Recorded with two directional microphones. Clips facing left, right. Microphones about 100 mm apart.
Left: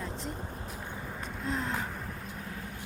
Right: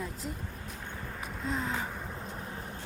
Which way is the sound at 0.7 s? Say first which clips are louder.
Left 1 dB; 10° left (ahead or behind).